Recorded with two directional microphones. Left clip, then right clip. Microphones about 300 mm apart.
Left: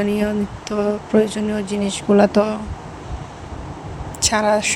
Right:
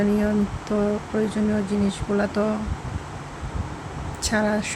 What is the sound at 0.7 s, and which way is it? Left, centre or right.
Speech, left.